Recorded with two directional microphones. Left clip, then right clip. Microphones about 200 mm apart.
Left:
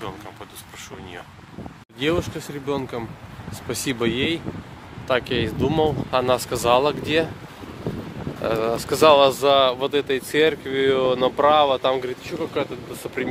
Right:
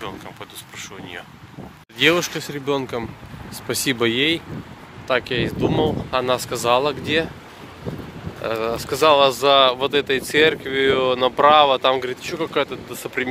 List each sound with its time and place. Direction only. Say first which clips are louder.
2.0 s speech: right 6 dB; centre (ahead or behind)
5.0 s speech: right 1 dB; 15° left (ahead or behind)
8.5 s speech: left 1 dB; 20° left (ahead or behind); by 12.6 s 5° right (ahead or behind)
13.0 s speech: right 3 dB; 5° left (ahead or behind)